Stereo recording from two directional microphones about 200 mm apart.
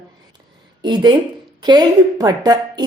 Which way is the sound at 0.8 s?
20° right (ahead or behind).